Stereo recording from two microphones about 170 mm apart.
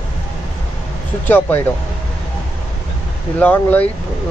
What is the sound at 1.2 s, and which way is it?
Speech, 10° left (ahead or behind).